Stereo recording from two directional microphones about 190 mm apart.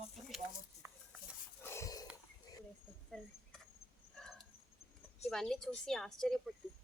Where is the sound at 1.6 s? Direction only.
15° left (ahead or behind).